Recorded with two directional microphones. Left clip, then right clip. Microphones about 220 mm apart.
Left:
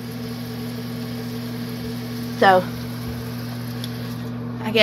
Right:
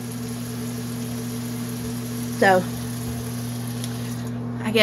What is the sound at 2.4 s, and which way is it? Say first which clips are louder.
Speech: left 3 dB; 15° right (ahead or behind).